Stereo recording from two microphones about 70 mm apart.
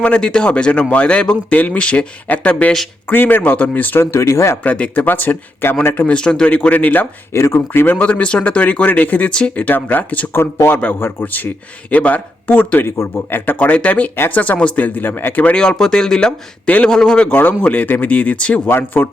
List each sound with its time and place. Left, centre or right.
0.0 s speech: centre
4.0 s speech: left
4.6 s speech: left
6.1 s speech: centre
7.3 s speech: left
7.9 s speech: centre
10.3 s speech: left
15.5 s speech: centre
18.7 s speech: left